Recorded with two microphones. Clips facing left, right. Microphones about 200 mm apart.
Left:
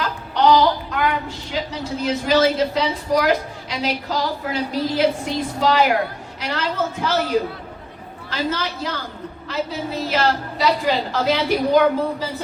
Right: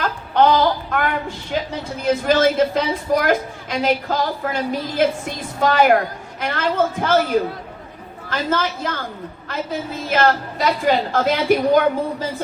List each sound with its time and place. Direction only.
0.0 s a sound: 50° right (ahead or behind)
1.5 s a woman's voice: 55° right (ahead or behind)
8.3 s a woman's voice: 50° right (ahead or behind)